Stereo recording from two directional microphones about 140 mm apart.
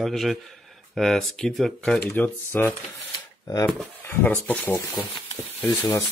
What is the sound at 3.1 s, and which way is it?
Camera, 30° left (ahead or behind).